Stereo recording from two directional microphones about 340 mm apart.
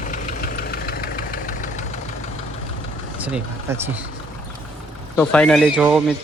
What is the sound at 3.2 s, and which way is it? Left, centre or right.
Speech, centre.